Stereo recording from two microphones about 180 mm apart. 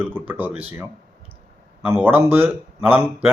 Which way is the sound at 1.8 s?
10° right (ahead or behind).